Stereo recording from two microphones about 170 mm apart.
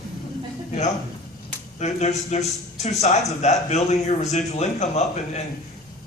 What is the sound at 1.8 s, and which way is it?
A man's voice, 40° left (ahead or behind).